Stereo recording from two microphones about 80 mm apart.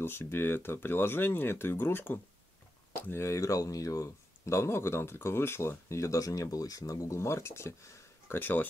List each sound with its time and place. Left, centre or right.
0.0 s speech: left
8.4 s speech: left